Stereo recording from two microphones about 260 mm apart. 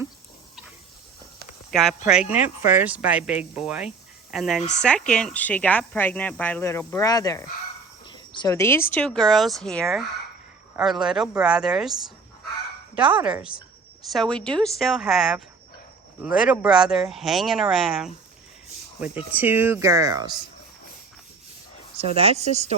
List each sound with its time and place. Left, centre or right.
1.7 s speech: centre
2.3 s speech: left
2.6 s speech: centre
13.0 s speech: centre
21.9 s speech: right